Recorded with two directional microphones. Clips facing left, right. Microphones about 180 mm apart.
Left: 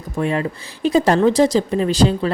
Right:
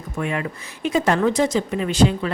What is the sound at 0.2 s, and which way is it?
Speech, 30° left (ahead or behind).